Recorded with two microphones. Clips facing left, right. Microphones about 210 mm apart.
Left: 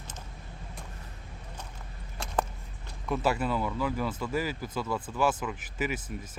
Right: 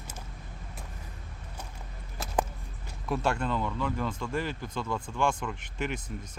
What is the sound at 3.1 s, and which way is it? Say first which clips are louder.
Speech: left 1 dB; 5° left (ahead or behind).